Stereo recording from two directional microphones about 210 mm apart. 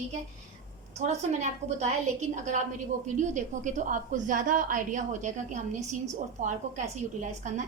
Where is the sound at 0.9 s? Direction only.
35° right (ahead or behind).